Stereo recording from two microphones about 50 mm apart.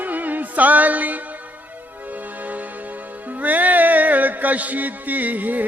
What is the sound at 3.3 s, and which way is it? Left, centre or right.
Music, right.